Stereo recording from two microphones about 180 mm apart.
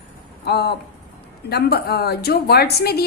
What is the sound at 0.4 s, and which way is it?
A woman's voice, 65° left (ahead or behind).